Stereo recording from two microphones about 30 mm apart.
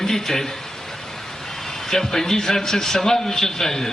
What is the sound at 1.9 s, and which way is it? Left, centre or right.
A man's voice, centre.